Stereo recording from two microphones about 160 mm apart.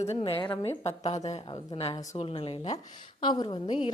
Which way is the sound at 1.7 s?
35° left (ahead or behind).